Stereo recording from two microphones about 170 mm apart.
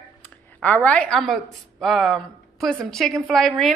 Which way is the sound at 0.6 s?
10° left (ahead or behind).